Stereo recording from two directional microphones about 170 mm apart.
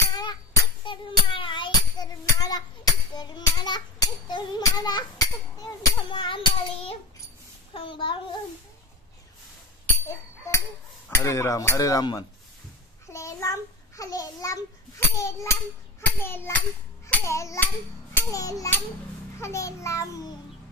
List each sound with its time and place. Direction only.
0.0 s music: 20° left (ahead or behind)
5.6 s a sound: 20° left (ahead or behind)
9.8 s a sound: 15° left (ahead or behind)
13.1 s a child's voice: 15° left (ahead or behind)
18.1 s music: 20° left (ahead or behind)
19.3 s a child's voice: 15° left (ahead or behind)